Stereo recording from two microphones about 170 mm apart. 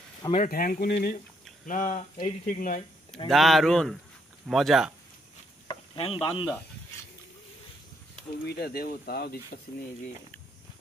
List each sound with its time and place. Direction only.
0.3 s speech: 55° left (ahead or behind)
1.7 s speech: 50° left (ahead or behind)
3.3 s speech: centre (ahead or behind)
5.7 s speech: 35° left (ahead or behind)
8.5 s speech: 65° left (ahead or behind)